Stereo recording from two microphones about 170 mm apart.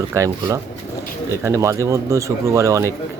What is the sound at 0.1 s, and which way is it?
Speech, 20° right (ahead or behind).